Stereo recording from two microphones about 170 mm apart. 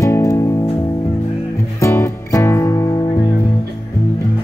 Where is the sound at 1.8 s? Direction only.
15° left (ahead or behind).